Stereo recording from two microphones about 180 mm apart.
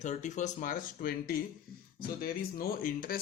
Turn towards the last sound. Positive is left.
turn(degrees=50)  # may be behind; listen again after turning